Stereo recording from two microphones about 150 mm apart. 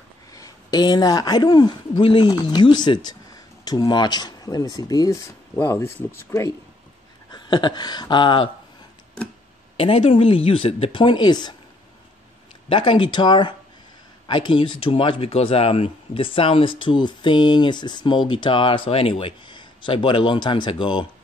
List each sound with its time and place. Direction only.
0.4 s speech: 25° left (ahead or behind)
7.2 s speech: 30° left (ahead or behind)
9.8 s speech: 40° left (ahead or behind)
12.6 s speech: 35° left (ahead or behind)